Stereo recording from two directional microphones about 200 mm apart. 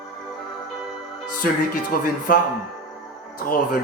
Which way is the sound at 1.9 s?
45° left (ahead or behind).